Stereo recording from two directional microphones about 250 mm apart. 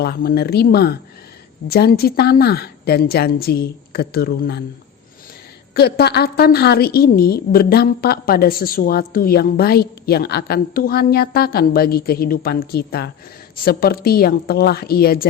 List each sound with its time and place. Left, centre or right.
0.0 s a woman's voice: left
5.7 s a woman's voice: left